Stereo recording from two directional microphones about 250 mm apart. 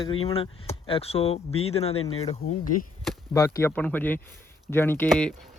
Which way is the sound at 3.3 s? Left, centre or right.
Centre.